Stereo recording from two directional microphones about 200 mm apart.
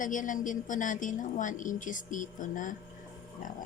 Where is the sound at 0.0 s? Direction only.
40° left (ahead or behind).